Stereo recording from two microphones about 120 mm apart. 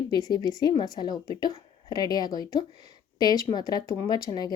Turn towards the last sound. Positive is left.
turn(degrees=30)  # may be behind; listen again after turning